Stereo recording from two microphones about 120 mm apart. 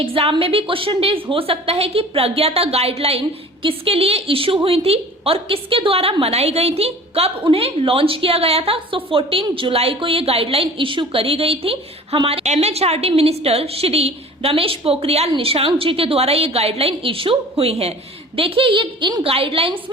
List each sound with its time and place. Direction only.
0.0 s a woman's voice: 50° right (ahead or behind)